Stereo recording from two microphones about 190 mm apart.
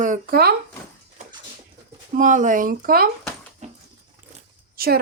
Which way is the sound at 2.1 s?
40° right (ahead or behind).